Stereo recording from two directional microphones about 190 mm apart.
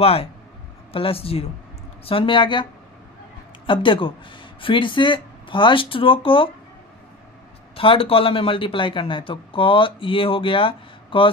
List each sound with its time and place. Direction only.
0.0 s speech: 30° left (ahead or behind)
3.6 s speech: 25° left (ahead or behind)
7.7 s speech: 30° left (ahead or behind)